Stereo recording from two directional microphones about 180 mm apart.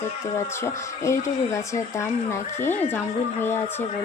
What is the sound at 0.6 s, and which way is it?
Speech, 15° left (ahead or behind).